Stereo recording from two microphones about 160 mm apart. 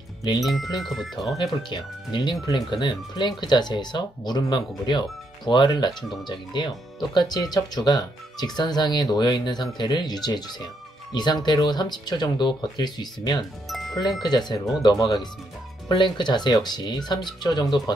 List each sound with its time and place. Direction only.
0.4 s speech: centre (ahead or behind)
1.4 s speech: 30° left (ahead or behind)
13.7 s music: centre (ahead or behind)
14.0 s speech: centre (ahead or behind)
14.3 s speech: 25° left (ahead or behind)